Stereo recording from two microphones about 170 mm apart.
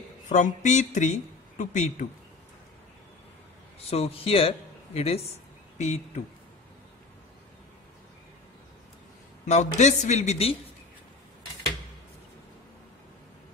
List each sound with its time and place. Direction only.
0.3 s speech: 45° left (ahead or behind)
3.8 s speech: 35° left (ahead or behind)
9.5 s a woman's voice: 45° left (ahead or behind)